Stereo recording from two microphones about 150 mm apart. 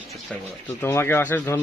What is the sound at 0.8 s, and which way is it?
Speech, 15° left (ahead or behind).